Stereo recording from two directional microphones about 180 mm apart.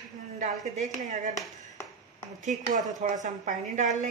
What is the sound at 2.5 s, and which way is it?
A woman's voice, 40° right (ahead or behind).